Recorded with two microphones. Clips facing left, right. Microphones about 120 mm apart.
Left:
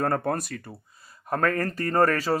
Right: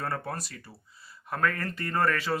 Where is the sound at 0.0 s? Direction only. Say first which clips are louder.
Left 8 dB; 50° left (ahead or behind).